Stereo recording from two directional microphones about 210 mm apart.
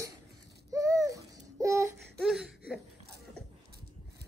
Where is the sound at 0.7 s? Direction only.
15° right (ahead or behind).